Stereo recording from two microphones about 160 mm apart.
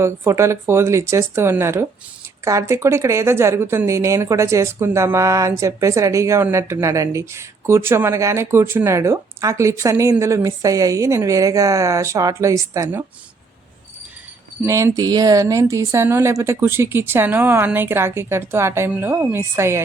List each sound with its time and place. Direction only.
0.0 s a woman's voice: 15° right (ahead or behind)
14.6 s a woman's voice: 15° right (ahead or behind)